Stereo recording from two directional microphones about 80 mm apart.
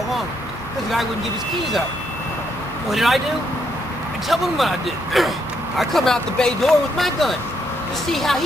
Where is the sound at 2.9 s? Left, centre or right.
Centre.